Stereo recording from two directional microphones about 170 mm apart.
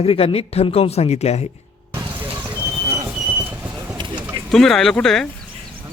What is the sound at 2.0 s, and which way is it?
Vehicle, 25° right (ahead or behind).